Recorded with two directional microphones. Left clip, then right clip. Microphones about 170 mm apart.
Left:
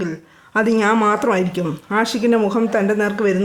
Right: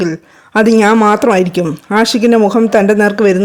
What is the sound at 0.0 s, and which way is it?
Speech, 45° right (ahead or behind).